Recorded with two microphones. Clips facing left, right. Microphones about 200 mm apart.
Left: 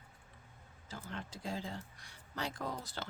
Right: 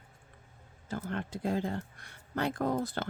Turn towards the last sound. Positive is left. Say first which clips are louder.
# right 11 dB
turn(degrees=-55)  # may be behind; listen again after turning